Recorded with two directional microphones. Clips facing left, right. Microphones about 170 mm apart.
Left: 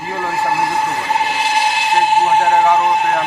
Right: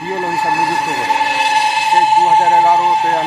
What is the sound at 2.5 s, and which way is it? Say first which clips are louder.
Speech: right 1 dB; 35° right (ahead or behind).